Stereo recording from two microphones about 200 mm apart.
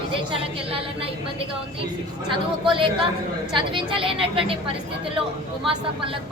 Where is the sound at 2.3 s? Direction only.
25° right (ahead or behind).